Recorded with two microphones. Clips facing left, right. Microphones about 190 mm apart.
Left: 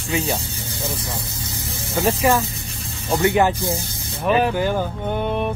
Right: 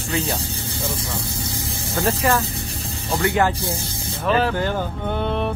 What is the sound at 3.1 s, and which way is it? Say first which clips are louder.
Speech: left 3 dB; 20° left (ahead or behind).